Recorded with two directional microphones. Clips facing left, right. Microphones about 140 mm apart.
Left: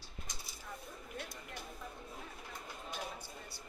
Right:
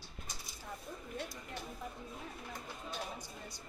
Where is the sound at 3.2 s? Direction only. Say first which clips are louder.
Right 1 dB; 15° right (ahead or behind).